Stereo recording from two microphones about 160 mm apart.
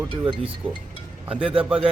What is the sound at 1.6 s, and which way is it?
Speech, 5° right (ahead or behind).